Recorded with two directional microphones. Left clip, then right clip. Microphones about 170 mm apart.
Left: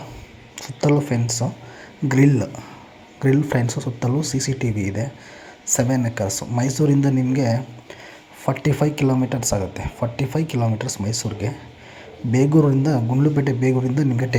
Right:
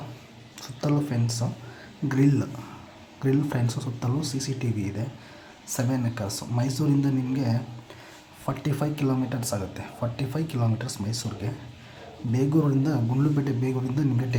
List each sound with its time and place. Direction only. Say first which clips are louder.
0.6 s speech: left 8 dB; 25° left (ahead or behind)